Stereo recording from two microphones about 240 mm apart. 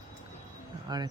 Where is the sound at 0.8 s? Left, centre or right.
Centre.